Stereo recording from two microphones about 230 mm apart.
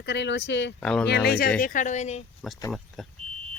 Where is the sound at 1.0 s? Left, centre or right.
Left.